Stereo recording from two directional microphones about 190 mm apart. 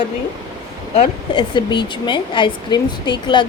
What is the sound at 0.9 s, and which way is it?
Speech, 30° left (ahead or behind).